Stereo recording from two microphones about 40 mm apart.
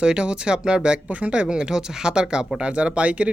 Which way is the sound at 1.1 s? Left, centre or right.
Right.